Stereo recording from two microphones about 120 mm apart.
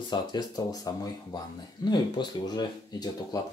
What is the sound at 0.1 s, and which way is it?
Speech, 35° left (ahead or behind).